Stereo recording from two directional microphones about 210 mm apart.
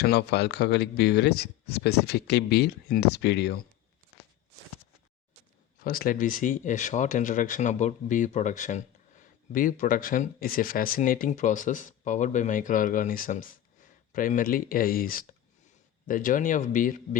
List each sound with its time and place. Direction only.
0.0 s speech: 50° left (ahead or behind)
5.8 s speech: 40° left (ahead or behind)